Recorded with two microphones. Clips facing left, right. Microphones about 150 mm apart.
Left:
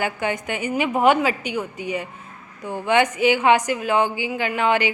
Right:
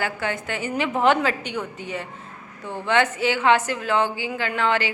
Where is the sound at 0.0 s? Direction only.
15° left (ahead or behind).